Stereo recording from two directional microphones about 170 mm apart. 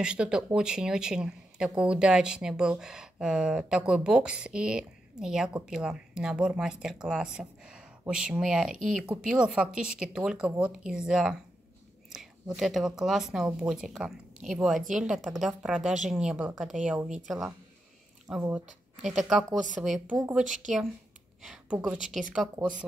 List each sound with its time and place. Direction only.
0.0 s speech: 5° right (ahead or behind)
12.5 s speech: centre (ahead or behind)
20.4 s speech: 50° right (ahead or behind)
21.4 s a woman's voice: 5° right (ahead or behind)